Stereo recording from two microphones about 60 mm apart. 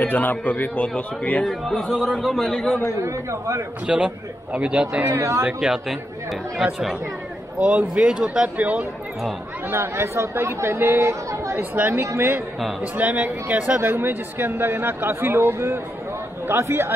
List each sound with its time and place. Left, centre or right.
0.0 s a man's voice: left
1.4 s speech: centre
3.0 s a man's voice: right
3.8 s a man's voice: centre
5.1 s speech: right
5.6 s a man's voice: centre
7.6 s a man's voice: right
9.7 s speech: right
12.2 s a man's voice: right
13.7 s speech: right